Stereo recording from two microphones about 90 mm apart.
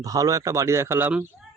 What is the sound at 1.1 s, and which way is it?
Speech, 20° right (ahead or behind).